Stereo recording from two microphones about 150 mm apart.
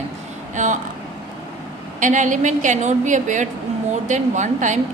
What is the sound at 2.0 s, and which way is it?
A woman's voice, 55° right (ahead or behind).